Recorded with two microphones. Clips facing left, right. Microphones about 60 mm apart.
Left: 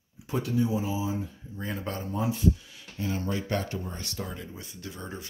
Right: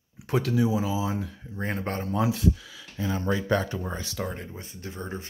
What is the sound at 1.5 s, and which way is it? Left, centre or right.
Speech, right.